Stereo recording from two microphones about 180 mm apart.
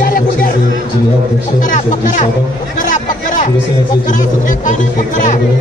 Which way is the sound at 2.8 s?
45° left (ahead or behind).